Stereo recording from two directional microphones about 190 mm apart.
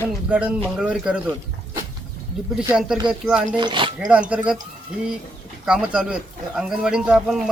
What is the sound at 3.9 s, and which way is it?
Speech, 5° right (ahead or behind).